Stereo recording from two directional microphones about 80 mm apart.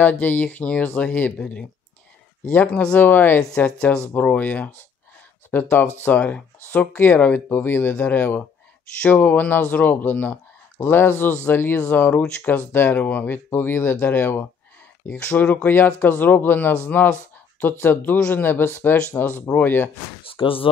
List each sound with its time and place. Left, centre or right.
0.0 s speech: centre
3.5 s speech: centre
20.4 s speech: left